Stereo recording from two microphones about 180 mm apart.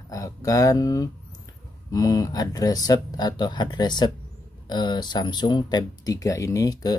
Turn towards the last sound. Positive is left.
turn(degrees=20)  # may be behind; listen again after turning